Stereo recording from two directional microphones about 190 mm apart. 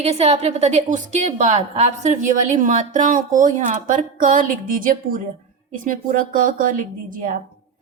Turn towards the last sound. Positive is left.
turn(degrees=-45)  # may be behind; listen again after turning